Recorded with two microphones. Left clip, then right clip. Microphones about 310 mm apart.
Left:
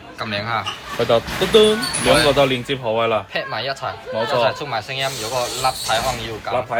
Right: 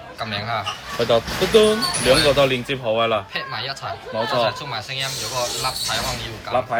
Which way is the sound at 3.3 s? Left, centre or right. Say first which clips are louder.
Left 3 dB; centre.